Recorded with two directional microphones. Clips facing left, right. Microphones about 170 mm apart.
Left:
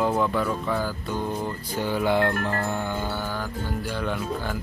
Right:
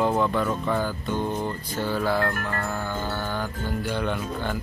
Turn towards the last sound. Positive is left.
turn(degrees=0)  # may be behind; listen again after turning